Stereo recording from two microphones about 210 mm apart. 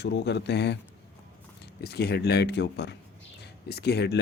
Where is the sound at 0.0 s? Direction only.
55° left (ahead or behind).